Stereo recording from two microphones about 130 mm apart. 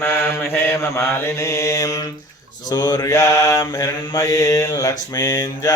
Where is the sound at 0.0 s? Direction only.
15° left (ahead or behind).